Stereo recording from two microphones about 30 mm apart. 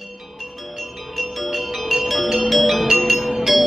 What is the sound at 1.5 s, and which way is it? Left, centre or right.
Music, centre.